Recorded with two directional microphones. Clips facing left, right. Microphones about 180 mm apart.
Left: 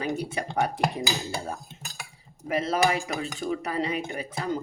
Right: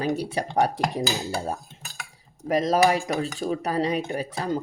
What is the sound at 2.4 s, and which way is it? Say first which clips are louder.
Speech: right 4 dB; 40° right (ahead or behind).